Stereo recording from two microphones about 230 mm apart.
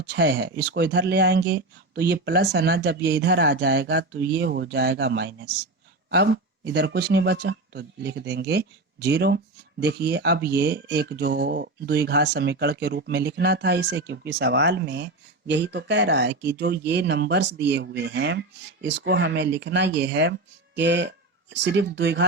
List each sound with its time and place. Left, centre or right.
0.0 s speech: right